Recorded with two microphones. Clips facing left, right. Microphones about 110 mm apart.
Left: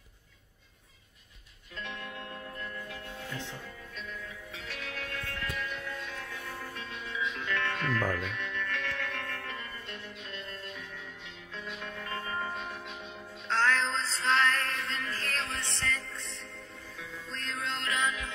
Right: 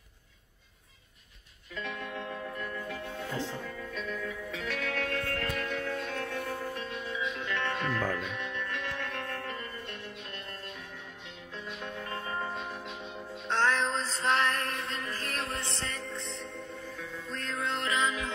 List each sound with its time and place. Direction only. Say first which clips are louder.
4.6 s music: right 7 dB; 60° right (ahead or behind)
6.6 s music: right 5 dB; 25° right (ahead or behind)
11.5 s music: right 1 dB; 20° right (ahead or behind)
15.5 s music: left 1 dB; 30° right (ahead or behind)
17.3 s music: right 3 dB; 10° right (ahead or behind)